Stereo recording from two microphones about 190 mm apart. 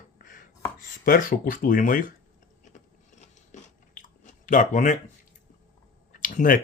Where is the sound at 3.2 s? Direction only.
40° left (ahead or behind).